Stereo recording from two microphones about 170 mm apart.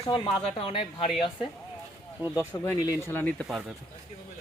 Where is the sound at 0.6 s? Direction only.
30° left (ahead or behind).